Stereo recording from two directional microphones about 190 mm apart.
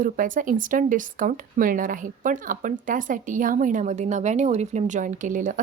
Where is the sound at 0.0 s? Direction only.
45° right (ahead or behind).